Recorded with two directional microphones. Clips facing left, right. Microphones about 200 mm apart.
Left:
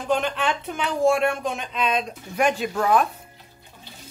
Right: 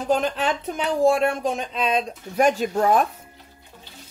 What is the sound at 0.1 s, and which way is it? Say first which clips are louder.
Speech: right 1 dB; 40° right (ahead or behind).